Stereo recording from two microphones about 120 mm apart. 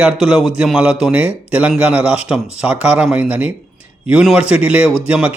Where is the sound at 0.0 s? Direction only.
5° right (ahead or behind).